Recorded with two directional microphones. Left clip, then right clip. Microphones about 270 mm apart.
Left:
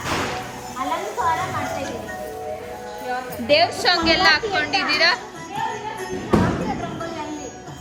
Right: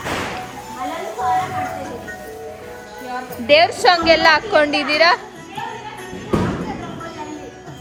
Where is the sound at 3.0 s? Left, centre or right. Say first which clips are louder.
Right 4 dB; centre.